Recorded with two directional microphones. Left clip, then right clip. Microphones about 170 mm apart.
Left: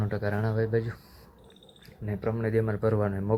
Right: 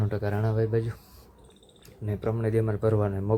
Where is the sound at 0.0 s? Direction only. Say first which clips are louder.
Even; 10° right (ahead or behind).